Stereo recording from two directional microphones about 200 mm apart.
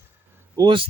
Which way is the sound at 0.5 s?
25° right (ahead or behind).